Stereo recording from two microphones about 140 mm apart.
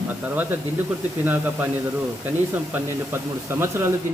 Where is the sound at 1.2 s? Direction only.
15° right (ahead or behind).